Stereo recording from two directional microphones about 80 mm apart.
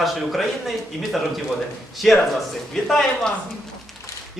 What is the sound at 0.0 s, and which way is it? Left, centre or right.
Speech, centre.